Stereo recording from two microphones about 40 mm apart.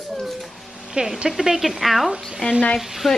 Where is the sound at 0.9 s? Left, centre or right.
Centre.